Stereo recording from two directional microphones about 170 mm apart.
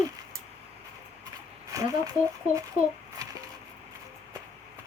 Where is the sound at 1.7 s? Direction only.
20° right (ahead or behind).